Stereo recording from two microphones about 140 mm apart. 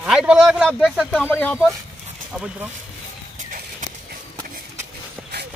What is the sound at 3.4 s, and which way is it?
Horse, 70° right (ahead or behind).